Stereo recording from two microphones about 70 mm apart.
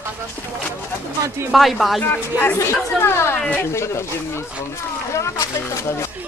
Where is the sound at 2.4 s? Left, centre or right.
Left.